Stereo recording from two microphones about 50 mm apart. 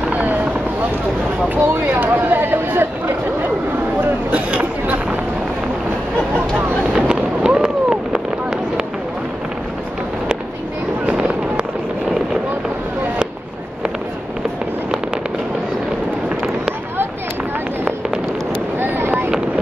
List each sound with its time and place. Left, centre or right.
0.1 s vehicle: right
1.5 s a sound: right
4.3 s chatter: right
6.9 s fireworks: centre
11.1 s fireworks: centre
18.8 s boat: right